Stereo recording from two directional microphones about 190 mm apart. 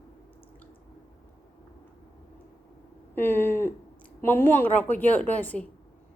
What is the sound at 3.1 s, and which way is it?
A woman's voice, 10° left (ahead or behind).